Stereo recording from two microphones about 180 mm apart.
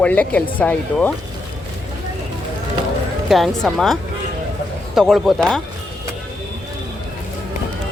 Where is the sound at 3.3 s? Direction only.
Centre (ahead or behind).